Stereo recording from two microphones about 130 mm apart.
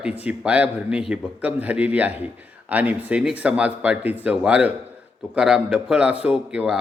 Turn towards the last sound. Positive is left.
turn(degrees=-10)  # may be behind; listen again after turning